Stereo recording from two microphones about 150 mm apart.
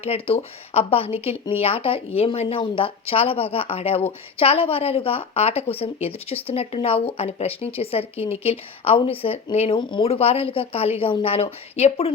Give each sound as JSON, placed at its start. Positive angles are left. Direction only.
{"t": 0.0, "sound": "speech", "side_deg": 40}